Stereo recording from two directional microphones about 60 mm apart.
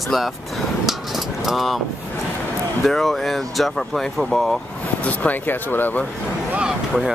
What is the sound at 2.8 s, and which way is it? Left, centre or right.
Speech, centre.